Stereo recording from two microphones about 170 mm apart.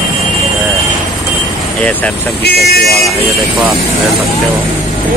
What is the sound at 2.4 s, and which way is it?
Speech, 70° left (ahead or behind).